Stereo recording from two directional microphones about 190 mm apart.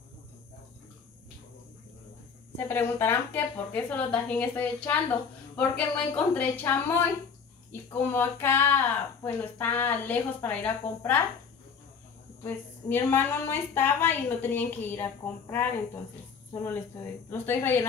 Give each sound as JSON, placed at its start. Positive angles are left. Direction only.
{"t": 2.5, "sound": "a woman's voice", "side_deg": 10}
{"t": 12.4, "sound": "a woman's voice", "side_deg": 10}
{"t": 17.3, "sound": "a woman's voice", "side_deg": 15}